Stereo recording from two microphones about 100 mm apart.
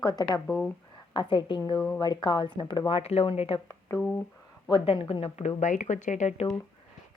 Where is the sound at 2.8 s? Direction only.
80° left.